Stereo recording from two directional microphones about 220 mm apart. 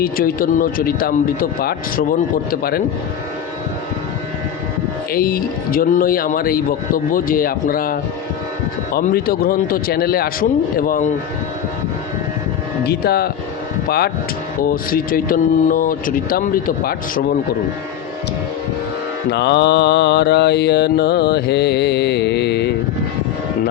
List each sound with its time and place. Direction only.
0.0 s speech: 40° left (ahead or behind)
5.1 s speech: 40° left (ahead or behind)
12.8 s speech: 45° left (ahead or behind)
19.3 s mantra: 50° left (ahead or behind)